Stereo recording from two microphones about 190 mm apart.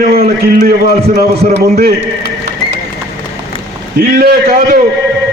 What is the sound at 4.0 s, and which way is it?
Speech, 50° right (ahead or behind).